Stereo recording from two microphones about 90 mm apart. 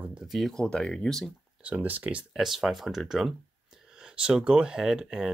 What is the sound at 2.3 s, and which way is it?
Speech, 5° right (ahead or behind).